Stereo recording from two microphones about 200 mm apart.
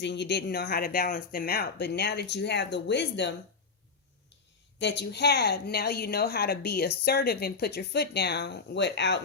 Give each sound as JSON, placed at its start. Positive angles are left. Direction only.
{"t": 0.0, "sound": "speech", "side_deg": 60}
{"t": 4.8, "sound": "a woman's voice", "side_deg": 55}